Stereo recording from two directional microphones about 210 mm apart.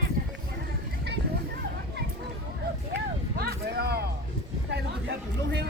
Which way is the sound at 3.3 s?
45° right (ahead or behind).